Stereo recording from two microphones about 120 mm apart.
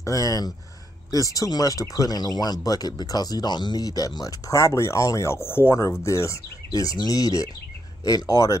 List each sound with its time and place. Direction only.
0.0 s speech: 30° left (ahead or behind)